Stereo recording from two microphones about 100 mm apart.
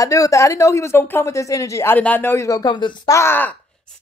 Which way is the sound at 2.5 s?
45° left (ahead or behind).